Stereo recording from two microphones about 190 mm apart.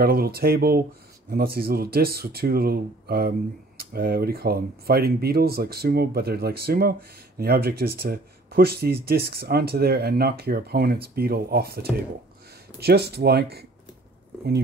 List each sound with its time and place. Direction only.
0.0 s speech: 55° right (ahead or behind)